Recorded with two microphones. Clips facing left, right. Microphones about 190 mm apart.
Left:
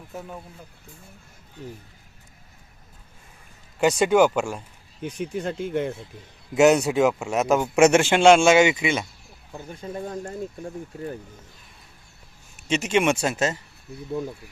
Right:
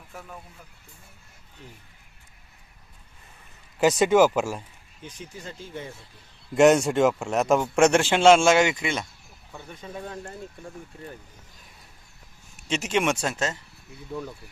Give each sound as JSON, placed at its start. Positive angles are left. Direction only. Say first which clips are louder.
{"t": 0.1, "sound": "speech", "louder": "left 6 dB", "side_deg": 20}
{"t": 3.8, "sound": "speech", "louder": "even", "side_deg": 0}
{"t": 5.0, "sound": "speech", "louder": "left 12 dB", "side_deg": 60}
{"t": 6.5, "sound": "speech", "louder": "even", "side_deg": 0}
{"t": 9.5, "sound": "speech", "louder": "left 5 dB", "side_deg": 35}
{"t": 12.6, "sound": "speech", "louder": "left 3 dB", "side_deg": 0}
{"t": 14.1, "sound": "speech", "louder": "left 5 dB", "side_deg": 25}